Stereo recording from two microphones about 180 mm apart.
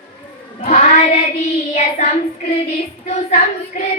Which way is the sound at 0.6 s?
40° left (ahead or behind).